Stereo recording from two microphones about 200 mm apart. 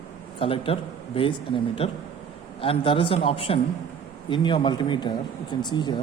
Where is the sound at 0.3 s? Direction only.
25° left (ahead or behind).